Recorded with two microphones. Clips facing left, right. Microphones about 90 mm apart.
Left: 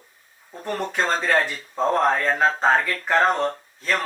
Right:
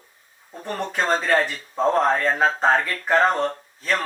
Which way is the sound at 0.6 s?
Centre (ahead or behind).